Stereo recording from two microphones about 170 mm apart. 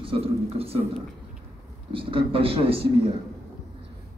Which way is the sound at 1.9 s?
35° right (ahead or behind).